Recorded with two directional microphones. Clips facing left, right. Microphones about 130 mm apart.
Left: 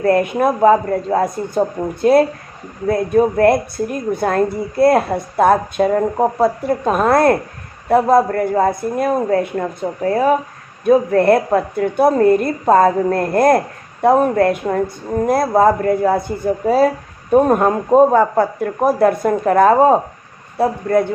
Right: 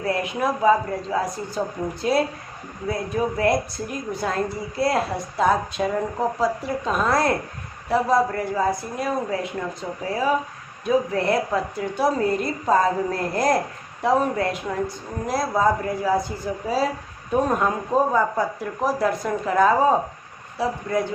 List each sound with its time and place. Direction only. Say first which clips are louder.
0.0 s a woman's voice: left 9 dB; 55° left (ahead or behind)